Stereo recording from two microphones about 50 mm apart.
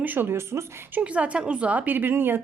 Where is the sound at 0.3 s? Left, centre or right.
Right.